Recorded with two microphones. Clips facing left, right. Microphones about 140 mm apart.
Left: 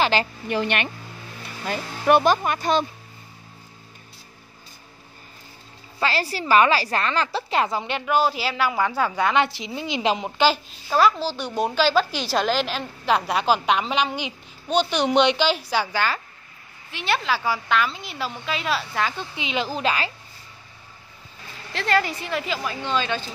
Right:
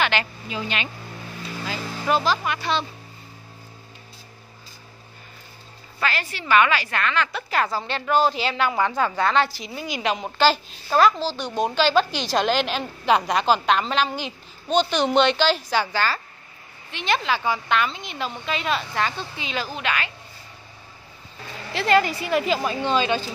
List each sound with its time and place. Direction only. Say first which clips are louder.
0.0 s a woman's voice: left 3 dB; 35° left (ahead or behind)
0.5 s speech: left 5 dB; 65° left (ahead or behind)
2.4 s speech: left 3 dB; 45° left (ahead or behind)
5.9 s a woman's voice: left 3 dB; 30° left (ahead or behind); by 19.1 s 5° left (ahead or behind)
19.1 s a woman's voice: left 2 dB; 20° left (ahead or behind)
19.7 s a woman's voice: left 3 dB; 35° left (ahead or behind)
21.7 s a woman's voice: right 3 dB; 5° right (ahead or behind)
22.5 s a woman's voice: right 4 dB; 20° right (ahead or behind)